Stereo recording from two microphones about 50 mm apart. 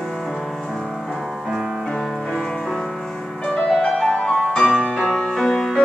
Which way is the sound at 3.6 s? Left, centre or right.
Centre.